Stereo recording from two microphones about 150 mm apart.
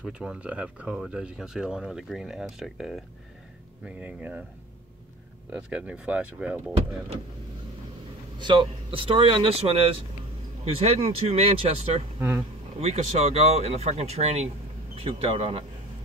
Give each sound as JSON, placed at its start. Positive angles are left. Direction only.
{"t": 0.0, "sound": "speech", "side_deg": -5}
{"t": 5.5, "sound": "speech", "side_deg": -5}
{"t": 8.4, "sound": "speech", "side_deg": -35}
{"t": 12.2, "sound": "speech", "side_deg": -15}
{"t": 12.8, "sound": "speech", "side_deg": -45}